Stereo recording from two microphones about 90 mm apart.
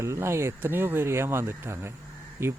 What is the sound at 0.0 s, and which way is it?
Speech, 30° right (ahead or behind).